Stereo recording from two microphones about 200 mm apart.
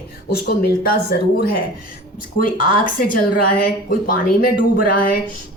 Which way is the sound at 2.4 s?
45° left (ahead or behind).